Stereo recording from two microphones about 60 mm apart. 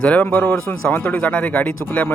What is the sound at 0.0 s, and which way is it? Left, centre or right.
Speech, left.